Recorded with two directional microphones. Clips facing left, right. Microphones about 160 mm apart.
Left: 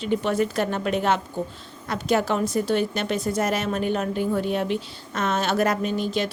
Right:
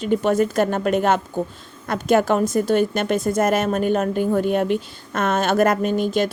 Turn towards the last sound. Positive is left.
turn(degrees=-50)  # may be behind; listen again after turning